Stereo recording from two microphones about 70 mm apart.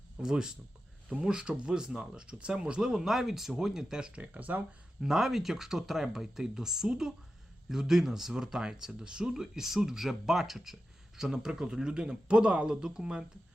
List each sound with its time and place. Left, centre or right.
0.2 s speech: centre
4.2 s speech: right
4.9 s speech: centre